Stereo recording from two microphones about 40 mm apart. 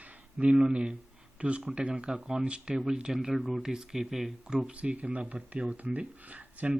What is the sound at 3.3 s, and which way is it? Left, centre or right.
Speech, centre.